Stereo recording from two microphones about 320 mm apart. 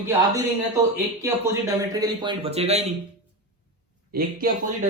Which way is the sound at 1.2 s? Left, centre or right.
Centre.